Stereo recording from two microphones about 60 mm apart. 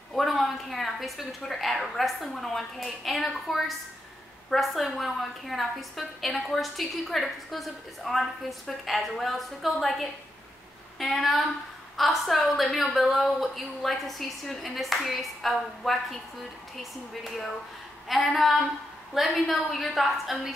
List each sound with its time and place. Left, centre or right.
0.1 s a woman's voice: centre